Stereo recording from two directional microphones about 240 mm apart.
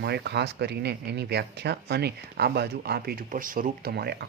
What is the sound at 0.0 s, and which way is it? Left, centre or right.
Speech, right.